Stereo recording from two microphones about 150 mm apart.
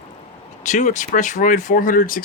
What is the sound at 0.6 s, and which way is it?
Speech, 55° left (ahead or behind).